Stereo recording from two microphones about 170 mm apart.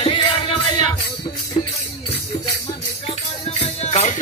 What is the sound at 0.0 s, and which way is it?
Music, 30° left (ahead or behind).